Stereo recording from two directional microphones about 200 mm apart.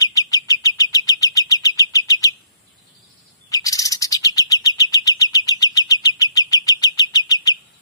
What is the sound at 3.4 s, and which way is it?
Bird, 15° left (ahead or behind).